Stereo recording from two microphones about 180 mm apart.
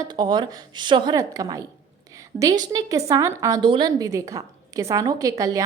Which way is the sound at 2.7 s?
20° right (ahead or behind).